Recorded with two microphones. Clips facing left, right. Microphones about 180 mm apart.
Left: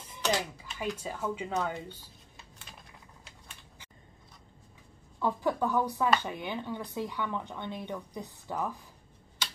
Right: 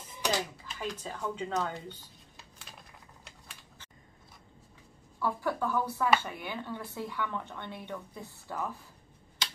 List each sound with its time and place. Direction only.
0.2 s a sound: 5° right (ahead or behind)
0.7 s speech: 10° left (ahead or behind)
5.2 s a woman's voice: 20° left (ahead or behind)